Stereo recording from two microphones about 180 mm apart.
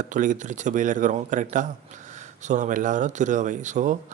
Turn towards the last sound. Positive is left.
turn(degrees=-45)  # may be behind; listen again after turning